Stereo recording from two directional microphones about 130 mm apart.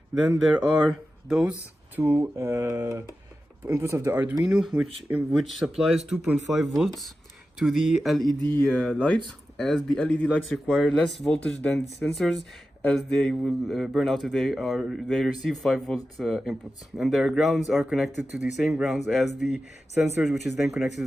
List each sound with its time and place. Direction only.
0.1 s a man's voice: 5° right (ahead or behind)
2.0 s a man's voice: 15° right (ahead or behind)